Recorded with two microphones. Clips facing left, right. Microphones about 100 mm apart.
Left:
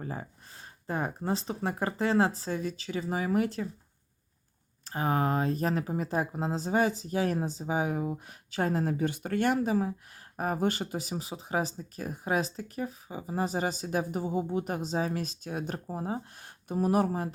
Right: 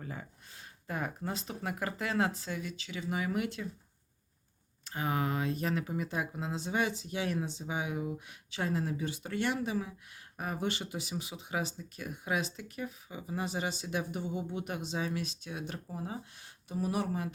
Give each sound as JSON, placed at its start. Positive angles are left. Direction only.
{"t": 0.0, "sound": "speech", "side_deg": 35}
{"t": 4.9, "sound": "speech", "side_deg": 35}